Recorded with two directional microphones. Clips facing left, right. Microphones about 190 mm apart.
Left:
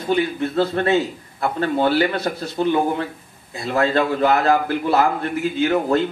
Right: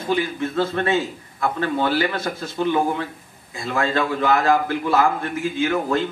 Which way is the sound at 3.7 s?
40° left (ahead or behind).